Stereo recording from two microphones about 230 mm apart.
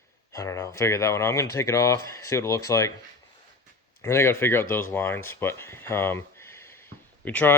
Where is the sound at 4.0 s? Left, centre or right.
Centre.